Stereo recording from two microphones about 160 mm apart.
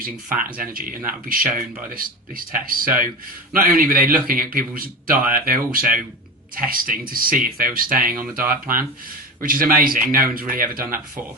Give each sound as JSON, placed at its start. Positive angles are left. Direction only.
{"t": 0.0, "sound": "speech", "side_deg": -65}